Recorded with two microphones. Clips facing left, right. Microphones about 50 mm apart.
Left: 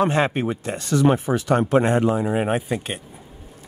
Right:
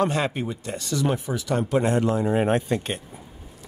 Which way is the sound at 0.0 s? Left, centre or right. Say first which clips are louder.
Left 4 dB; left.